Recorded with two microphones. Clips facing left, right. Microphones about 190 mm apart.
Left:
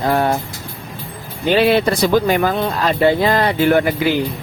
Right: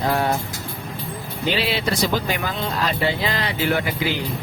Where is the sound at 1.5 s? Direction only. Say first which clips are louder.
Left 9 dB; 55° left (ahead or behind).